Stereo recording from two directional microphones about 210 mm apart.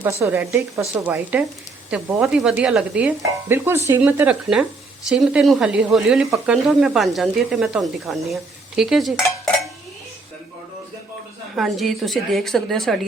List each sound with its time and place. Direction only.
0.0 s a woman's voice: 10° right (ahead or behind)
11.5 s speech: centre (ahead or behind)